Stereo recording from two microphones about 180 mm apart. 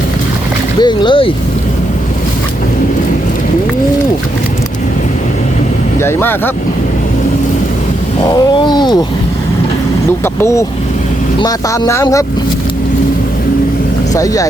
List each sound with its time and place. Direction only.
0.8 s cat: 25° left (ahead or behind)
6.0 s speech: 15° left (ahead or behind)
8.2 s cat: 20° left (ahead or behind)
10.4 s speech: 15° left (ahead or behind)
11.3 s cat: 20° left (ahead or behind)
14.1 s cat: 20° left (ahead or behind)